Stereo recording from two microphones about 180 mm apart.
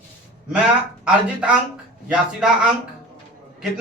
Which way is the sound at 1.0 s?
5° right (ahead or behind).